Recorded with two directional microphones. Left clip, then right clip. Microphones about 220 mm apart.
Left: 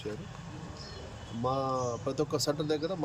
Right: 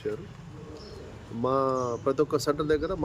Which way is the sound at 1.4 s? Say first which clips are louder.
Right 5 dB; 25° right (ahead or behind).